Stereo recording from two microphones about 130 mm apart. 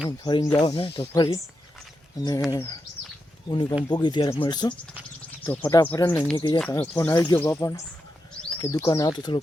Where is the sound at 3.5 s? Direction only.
35° left (ahead or behind).